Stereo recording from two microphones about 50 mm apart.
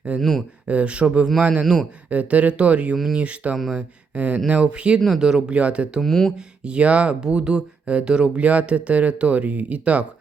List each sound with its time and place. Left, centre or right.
0.2 s speech: centre
0.7 s speech: right
1.6 s speech: centre
2.0 s speech: right
4.9 s speech: centre
5.2 s speech: centre
5.5 s speech: right
6.0 s speech: centre
6.7 s speech: right